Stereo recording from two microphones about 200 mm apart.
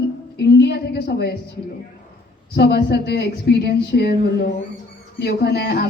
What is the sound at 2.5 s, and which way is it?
Music, 55° left (ahead or behind).